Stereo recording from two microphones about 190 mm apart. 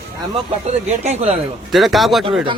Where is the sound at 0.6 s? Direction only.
35° right (ahead or behind).